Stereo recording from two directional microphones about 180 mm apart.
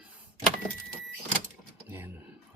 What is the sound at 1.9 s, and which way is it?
Speech, 10° right (ahead or behind).